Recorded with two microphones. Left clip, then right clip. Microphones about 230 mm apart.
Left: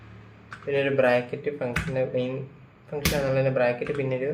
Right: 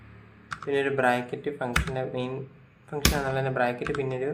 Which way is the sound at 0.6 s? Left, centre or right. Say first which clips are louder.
Left 2 dB; right.